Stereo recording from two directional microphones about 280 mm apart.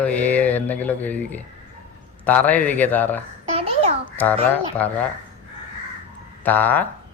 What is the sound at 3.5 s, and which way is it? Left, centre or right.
Babbling, right.